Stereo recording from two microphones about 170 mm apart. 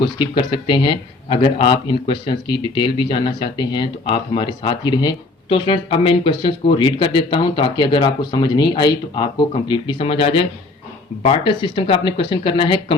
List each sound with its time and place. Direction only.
0.0 s speech: 30° left (ahead or behind)